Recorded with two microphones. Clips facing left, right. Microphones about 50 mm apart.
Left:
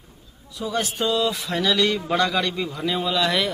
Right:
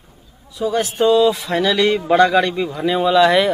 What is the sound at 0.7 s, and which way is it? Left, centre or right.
Speech, right.